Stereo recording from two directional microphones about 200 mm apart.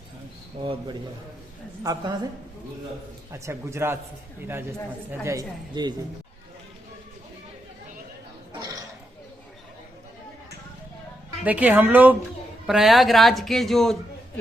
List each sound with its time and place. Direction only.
0.6 s a man's voice: 25° right (ahead or behind)
3.3 s speech: 15° right (ahead or behind)
5.2 s speech: 15° right (ahead or behind)
11.4 s speech: 10° right (ahead or behind)